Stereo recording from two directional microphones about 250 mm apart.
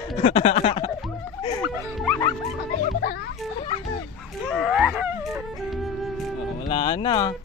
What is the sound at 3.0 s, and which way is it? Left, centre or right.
Speech, left.